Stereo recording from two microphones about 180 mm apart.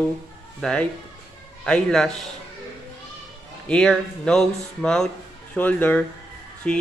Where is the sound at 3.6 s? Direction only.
5° left (ahead or behind).